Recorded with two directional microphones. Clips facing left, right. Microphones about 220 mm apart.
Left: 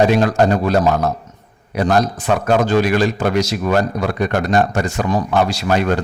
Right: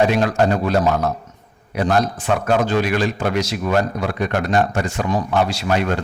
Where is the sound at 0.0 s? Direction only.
40° left (ahead or behind).